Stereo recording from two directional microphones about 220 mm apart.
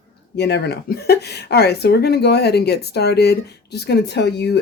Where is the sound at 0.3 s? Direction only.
50° left (ahead or behind).